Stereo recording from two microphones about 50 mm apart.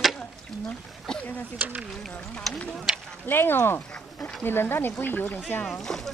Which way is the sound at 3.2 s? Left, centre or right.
Left.